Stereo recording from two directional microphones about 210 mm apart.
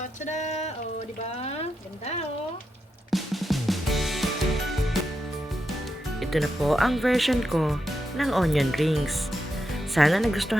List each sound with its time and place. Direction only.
0.3 s a sound: 35° left (ahead or behind)
3.1 s music: centre (ahead or behind)
6.1 s speech: centre (ahead or behind)